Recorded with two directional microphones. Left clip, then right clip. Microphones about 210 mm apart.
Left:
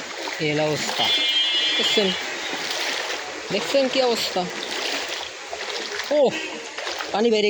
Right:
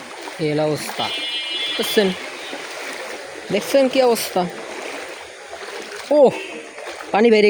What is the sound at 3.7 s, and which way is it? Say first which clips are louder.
Speech: right 5 dB; 75° right (ahead or behind).